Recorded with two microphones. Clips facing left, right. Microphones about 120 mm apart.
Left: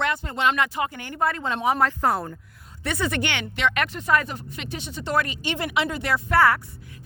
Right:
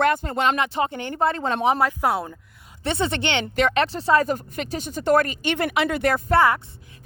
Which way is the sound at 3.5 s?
40° right (ahead or behind).